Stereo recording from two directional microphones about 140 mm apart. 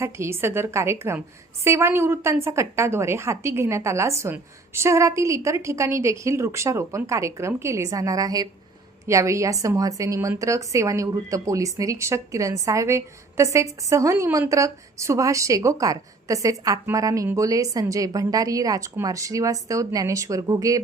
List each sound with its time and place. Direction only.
0.0 s a woman's voice: 20° right (ahead or behind)